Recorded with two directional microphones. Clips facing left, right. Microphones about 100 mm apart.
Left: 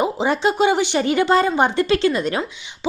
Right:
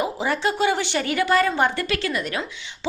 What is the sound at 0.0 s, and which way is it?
A woman's voice, 25° left (ahead or behind).